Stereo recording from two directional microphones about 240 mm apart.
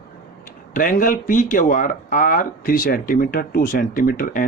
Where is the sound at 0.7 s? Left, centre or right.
Left.